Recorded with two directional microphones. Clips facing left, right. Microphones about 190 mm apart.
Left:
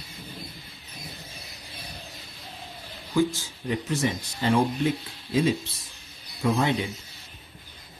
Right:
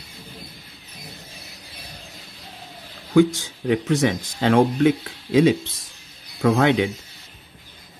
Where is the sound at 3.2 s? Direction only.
90° right.